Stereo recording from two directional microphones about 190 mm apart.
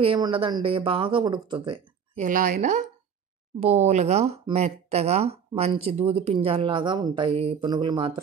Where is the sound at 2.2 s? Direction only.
45° right (ahead or behind); by 8.1 s 25° right (ahead or behind).